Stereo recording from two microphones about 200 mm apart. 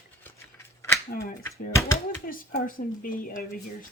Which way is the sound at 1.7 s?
15° left (ahead or behind).